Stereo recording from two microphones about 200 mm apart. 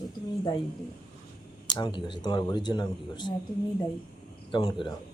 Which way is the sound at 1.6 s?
20° left (ahead or behind).